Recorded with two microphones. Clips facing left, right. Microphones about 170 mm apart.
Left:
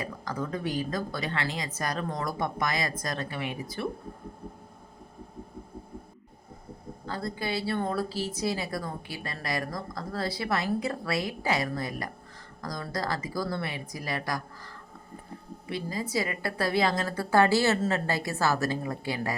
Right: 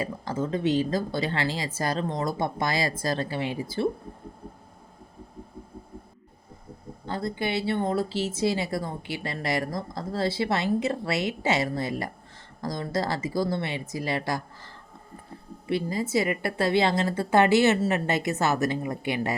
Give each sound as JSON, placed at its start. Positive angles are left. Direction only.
{"t": 0.0, "sound": "a woman's voice", "side_deg": -25}
{"t": 7.0, "sound": "a woman's voice", "side_deg": -25}